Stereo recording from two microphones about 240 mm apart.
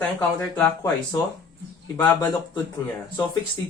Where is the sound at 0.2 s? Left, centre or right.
Centre.